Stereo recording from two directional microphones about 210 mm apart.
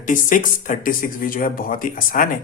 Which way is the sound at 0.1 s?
40° left (ahead or behind).